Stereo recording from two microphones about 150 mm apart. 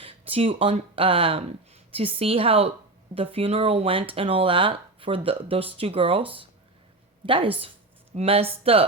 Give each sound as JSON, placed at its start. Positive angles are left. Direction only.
{"t": 0.0, "sound": "speech", "side_deg": -40}